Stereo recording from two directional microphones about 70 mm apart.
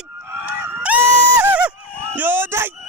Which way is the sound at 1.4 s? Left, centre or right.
Right.